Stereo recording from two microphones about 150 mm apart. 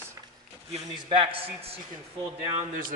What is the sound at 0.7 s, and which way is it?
Speech, 35° right (ahead or behind).